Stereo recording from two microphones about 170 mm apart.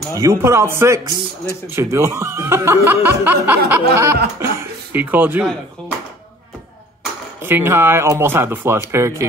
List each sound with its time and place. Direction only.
0.1 s speech: 15° right (ahead or behind)
7.4 s speech: 15° right (ahead or behind)